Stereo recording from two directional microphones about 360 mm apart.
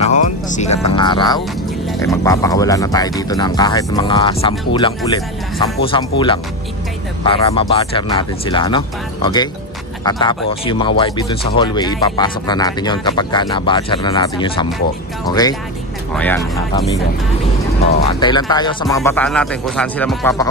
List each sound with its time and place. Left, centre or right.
0.0 s music: centre
0.8 s speech: centre
18.2 s speech: centre